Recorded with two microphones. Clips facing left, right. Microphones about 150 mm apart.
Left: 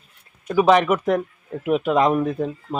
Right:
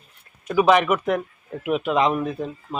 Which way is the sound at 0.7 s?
35° left (ahead or behind).